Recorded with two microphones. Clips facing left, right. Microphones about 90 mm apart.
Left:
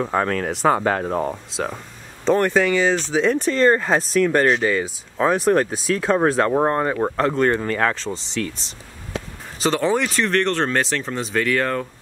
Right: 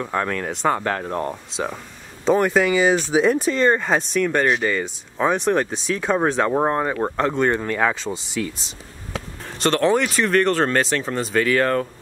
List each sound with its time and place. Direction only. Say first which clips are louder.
0.0 s speech: left 3 dB; 10° left (ahead or behind)